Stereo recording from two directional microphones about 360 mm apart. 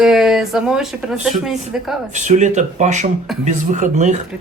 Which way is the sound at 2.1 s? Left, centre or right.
Centre.